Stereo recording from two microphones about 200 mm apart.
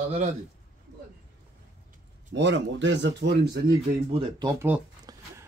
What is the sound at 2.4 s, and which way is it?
Speech, 60° right (ahead or behind).